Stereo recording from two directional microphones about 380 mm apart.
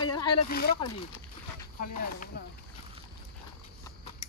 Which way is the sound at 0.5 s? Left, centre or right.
Left.